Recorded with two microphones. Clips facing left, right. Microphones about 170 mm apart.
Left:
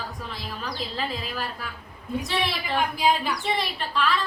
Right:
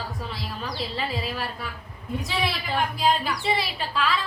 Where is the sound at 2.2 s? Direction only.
Centre (ahead or behind).